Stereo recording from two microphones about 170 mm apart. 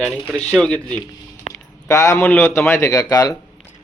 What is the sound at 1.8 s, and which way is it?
A man's voice, 20° left (ahead or behind).